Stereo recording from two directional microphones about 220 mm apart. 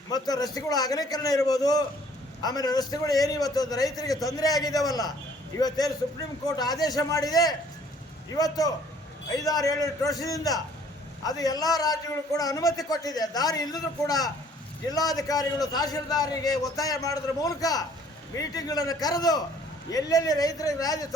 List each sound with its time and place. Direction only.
0.1 s a man's voice: 15° left (ahead or behind)
9.3 s a man's voice: 15° left (ahead or behind)